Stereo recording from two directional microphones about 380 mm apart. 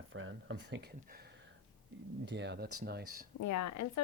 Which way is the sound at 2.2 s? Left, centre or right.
Right.